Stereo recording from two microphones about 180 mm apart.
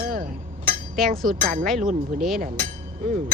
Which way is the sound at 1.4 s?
50° right (ahead or behind).